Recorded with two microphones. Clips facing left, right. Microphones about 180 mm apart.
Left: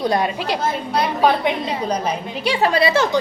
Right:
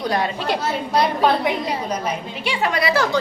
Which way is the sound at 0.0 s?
25° left (ahead or behind).